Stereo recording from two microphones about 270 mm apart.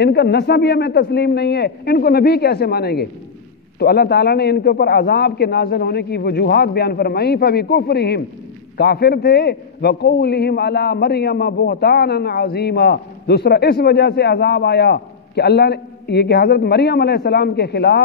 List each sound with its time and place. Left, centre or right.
0.0 s a man's voice: left